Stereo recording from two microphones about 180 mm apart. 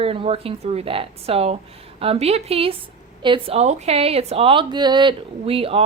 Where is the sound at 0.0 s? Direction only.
30° right (ahead or behind).